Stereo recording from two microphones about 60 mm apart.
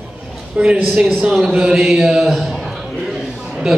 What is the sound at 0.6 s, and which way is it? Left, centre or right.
Mantra, centre.